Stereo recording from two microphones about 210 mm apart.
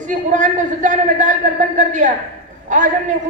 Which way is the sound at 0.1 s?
40° right (ahead or behind).